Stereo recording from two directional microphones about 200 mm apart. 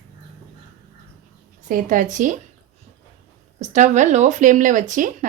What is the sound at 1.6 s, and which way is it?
Speech, 40° right (ahead or behind).